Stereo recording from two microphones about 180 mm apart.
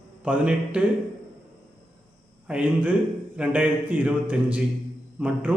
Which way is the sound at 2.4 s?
5° right (ahead or behind).